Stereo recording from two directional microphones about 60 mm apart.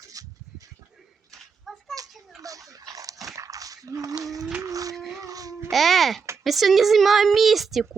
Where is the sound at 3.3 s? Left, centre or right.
Right.